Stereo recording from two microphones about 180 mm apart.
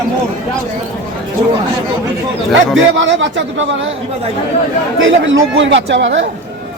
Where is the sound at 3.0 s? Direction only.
90° right.